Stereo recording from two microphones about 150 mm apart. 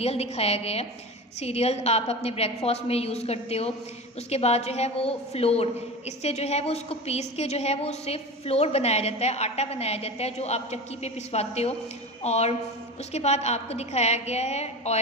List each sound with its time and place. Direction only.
0.0 s a woman's voice: 45° left (ahead or behind)